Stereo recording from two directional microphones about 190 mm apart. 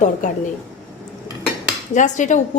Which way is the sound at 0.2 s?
40° left (ahead or behind).